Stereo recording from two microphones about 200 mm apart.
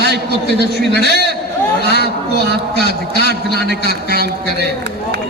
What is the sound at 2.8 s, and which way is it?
A man's voice, 55° left (ahead or behind).